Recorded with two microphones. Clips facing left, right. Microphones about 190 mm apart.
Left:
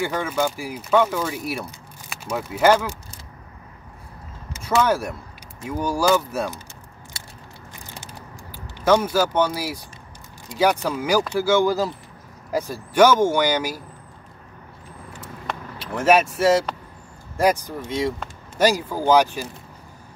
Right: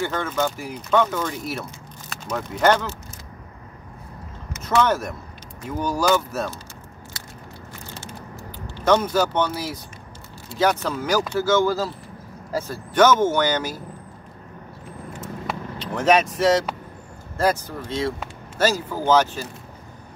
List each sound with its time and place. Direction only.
0.0 s speech: 10° left (ahead or behind)
4.6 s speech: 10° left (ahead or behind)
8.7 s speech: 10° left (ahead or behind)
15.8 s speech: 5° left (ahead or behind)